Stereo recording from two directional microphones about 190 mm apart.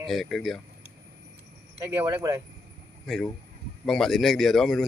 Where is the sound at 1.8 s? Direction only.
15° right (ahead or behind).